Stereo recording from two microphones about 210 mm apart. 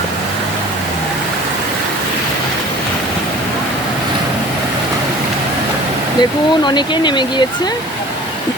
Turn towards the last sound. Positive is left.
turn(degrees=20)  # may be behind; listen again after turning